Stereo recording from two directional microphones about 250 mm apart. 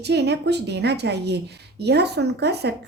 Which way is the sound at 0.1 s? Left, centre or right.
Right.